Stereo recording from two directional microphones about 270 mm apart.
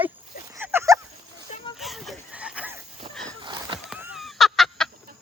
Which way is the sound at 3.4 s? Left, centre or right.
Centre.